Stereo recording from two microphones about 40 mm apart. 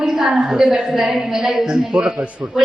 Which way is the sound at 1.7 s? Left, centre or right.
Centre.